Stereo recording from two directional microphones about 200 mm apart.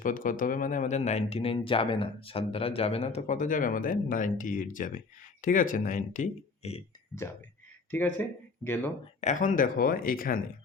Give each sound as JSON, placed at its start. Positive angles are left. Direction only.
{"t": 0.0, "sound": "speech", "side_deg": 40}
{"t": 7.9, "sound": "speech", "side_deg": 10}
{"t": 9.2, "sound": "speech", "side_deg": 40}